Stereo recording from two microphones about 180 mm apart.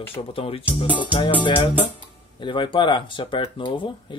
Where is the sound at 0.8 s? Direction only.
10° right (ahead or behind).